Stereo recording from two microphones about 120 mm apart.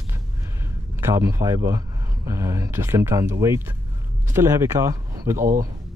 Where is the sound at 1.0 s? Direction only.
25° right (ahead or behind).